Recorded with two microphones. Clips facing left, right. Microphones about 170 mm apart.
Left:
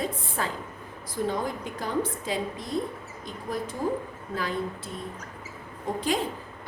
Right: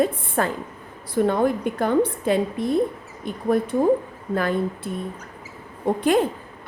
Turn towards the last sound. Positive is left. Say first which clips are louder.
# right 9 dB
turn(degrees=-60)  # may be behind; listen again after turning